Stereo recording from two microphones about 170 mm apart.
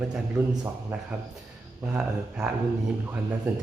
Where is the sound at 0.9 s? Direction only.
5° right (ahead or behind).